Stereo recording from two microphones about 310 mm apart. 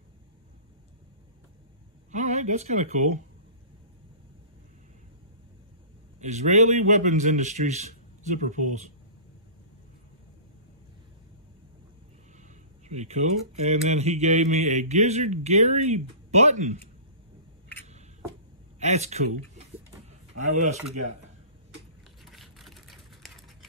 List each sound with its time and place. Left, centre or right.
2.0 s speech: right
6.1 s speech: right
12.8 s speech: right
18.8 s speech: right
20.1 s a sound: right
22.2 s a sound: centre